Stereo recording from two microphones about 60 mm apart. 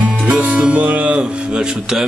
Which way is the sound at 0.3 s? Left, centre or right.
Centre.